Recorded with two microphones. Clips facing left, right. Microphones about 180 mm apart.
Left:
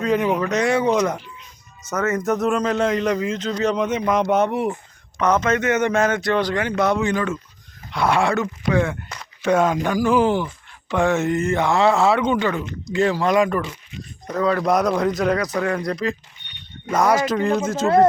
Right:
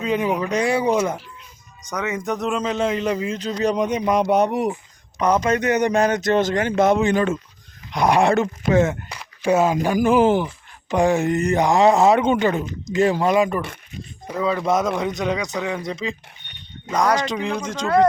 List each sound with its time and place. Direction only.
0.2 s speech: 10° right (ahead or behind)
0.5 s speech: 30° right (ahead or behind)
0.9 s speech: 10° right (ahead or behind)
1.9 s a man's voice: 5° left (ahead or behind)
3.1 s speech: 30° right (ahead or behind)
4.0 s speech: 15° right (ahead or behind)
5.4 s speech: 35° right (ahead or behind)
6.7 s speech: 20° right (ahead or behind)
8.7 s speech: 40° right (ahead or behind)
9.0 s a sound: 10° right (ahead or behind)
9.9 s speech: 20° right (ahead or behind)
11.0 s speech: 35° right (ahead or behind)
11.3 s a man's voice: 15° right (ahead or behind); by 17.8 s 5° left (ahead or behind)